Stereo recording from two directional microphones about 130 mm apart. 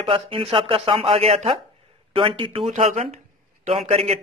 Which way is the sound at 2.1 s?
40° right (ahead or behind).